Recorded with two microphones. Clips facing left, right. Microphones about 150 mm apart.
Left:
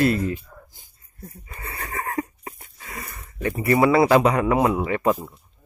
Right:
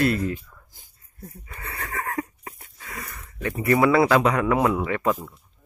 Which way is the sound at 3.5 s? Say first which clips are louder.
Left 1 dB; 10° left (ahead or behind).